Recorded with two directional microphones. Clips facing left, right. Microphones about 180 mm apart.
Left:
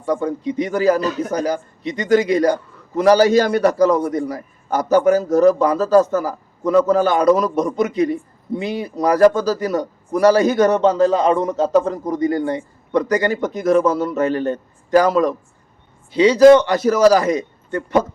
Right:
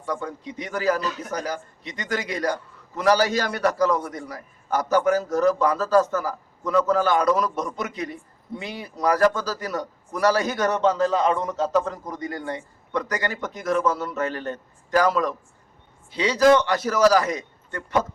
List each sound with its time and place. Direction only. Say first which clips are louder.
0.0 s a man's voice: left 10 dB; 25° left (ahead or behind)
1.0 s speech: left 9 dB; 45° left (ahead or behind)
1.5 s a man's voice: left 9 dB; 20° left (ahead or behind)